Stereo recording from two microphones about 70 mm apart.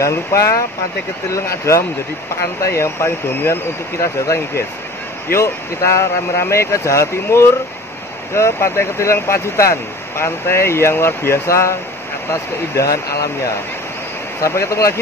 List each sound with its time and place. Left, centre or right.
0.0 s speech: left
14.4 s speech: left